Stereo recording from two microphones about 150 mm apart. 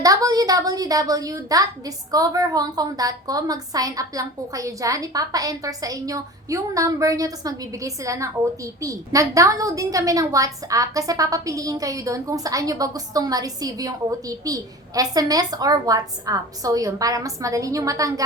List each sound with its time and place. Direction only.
0.0 s a woman's voice: 25° right (ahead or behind)